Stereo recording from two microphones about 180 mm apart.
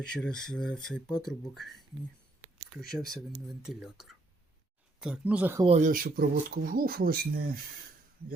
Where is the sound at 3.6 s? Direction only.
5° right (ahead or behind).